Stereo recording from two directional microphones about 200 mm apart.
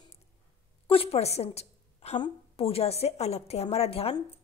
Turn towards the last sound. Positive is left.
turn(degrees=30)  # may be behind; listen again after turning